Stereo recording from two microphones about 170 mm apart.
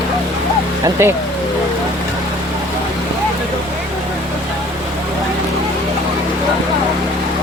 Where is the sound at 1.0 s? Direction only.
15° right (ahead or behind).